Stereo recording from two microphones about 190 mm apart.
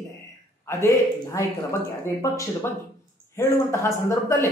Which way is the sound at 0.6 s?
15° left (ahead or behind).